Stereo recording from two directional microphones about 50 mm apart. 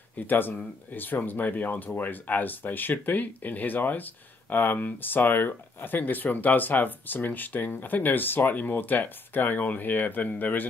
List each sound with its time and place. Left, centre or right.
0.2 s speech: left